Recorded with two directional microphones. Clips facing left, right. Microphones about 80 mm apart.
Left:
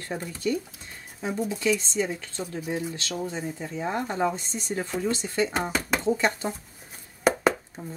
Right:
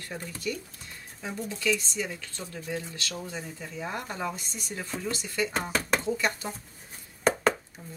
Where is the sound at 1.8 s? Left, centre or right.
Left.